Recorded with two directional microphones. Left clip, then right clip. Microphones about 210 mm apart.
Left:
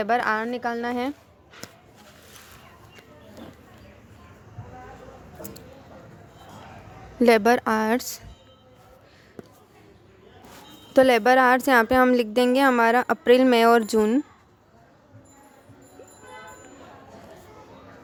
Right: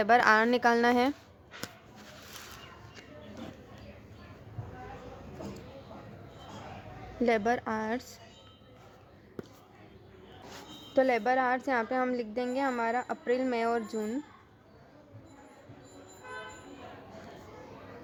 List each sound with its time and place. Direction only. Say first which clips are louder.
0.0 s a woman's voice: even; 5° left (ahead or behind)
7.3 s a woman's voice: left 10 dB; 25° left (ahead or behind)
10.9 s a woman's voice: left 10 dB; 35° left (ahead or behind)